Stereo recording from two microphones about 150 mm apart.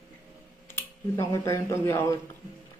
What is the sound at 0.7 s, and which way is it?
Speech, 15° left (ahead or behind).